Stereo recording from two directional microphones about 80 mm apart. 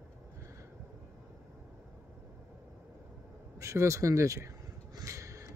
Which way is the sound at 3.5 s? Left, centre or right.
Right.